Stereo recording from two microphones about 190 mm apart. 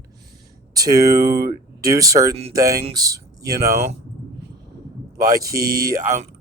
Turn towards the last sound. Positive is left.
turn(degrees=-15)  # may be behind; listen again after turning